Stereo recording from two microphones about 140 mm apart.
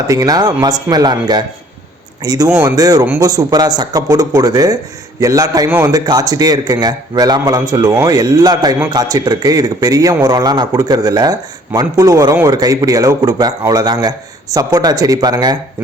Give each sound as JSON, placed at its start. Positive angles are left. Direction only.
{"t": 0.1, "sound": "a man's voice", "side_deg": -25}
{"t": 2.5, "sound": "speech", "side_deg": -15}
{"t": 2.7, "sound": "a man's voice", "side_deg": -25}